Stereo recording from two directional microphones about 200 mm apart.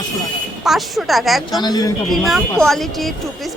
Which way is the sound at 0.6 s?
Centre (ahead or behind).